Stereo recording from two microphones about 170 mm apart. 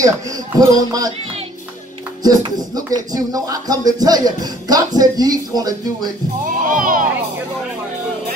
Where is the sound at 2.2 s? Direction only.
20° right (ahead or behind).